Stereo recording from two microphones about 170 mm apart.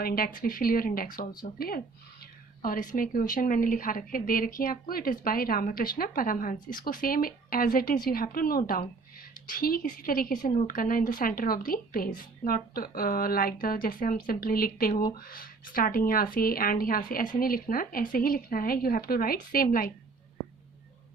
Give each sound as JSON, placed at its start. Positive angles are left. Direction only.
{"t": 0.0, "sound": "a woman's voice", "side_deg": 60}